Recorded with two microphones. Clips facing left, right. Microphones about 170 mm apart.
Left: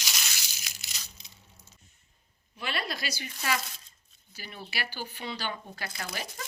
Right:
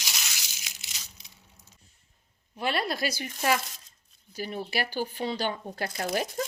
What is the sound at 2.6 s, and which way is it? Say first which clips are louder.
Speech: right 6 dB; 50° right (ahead or behind).